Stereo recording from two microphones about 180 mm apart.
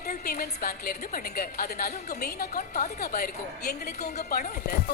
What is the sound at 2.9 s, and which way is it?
A woman's voice, 60° left (ahead or behind).